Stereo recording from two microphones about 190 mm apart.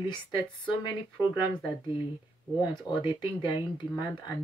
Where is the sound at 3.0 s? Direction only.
25° left (ahead or behind).